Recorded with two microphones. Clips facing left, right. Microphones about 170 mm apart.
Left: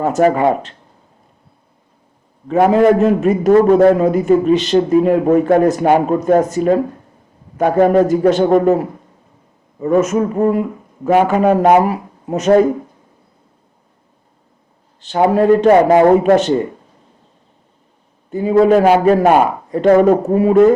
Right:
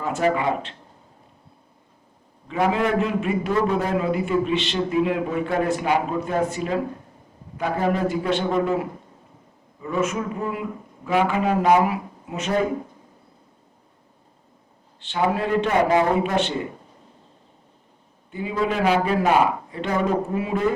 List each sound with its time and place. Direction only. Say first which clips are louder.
0.0 s speech: left 9 dB; 40° left (ahead or behind)
2.5 s speech: left 11 dB; 45° left (ahead or behind)
3.9 s speech: left 9 dB; 40° left (ahead or behind)
11.8 s speech: left 6 dB; 40° left (ahead or behind)
15.0 s speech: left 11 dB; 40° left (ahead or behind)
18.3 s a man's voice: left 14 dB; 40° left (ahead or behind)